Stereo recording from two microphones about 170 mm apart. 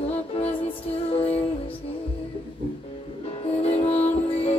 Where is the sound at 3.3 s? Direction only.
35° left (ahead or behind).